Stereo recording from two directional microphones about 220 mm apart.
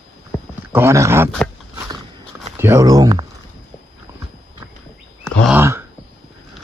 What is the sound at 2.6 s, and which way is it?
Speech, 15° right (ahead or behind).